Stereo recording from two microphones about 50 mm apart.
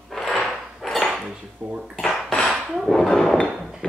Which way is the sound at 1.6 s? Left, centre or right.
Right.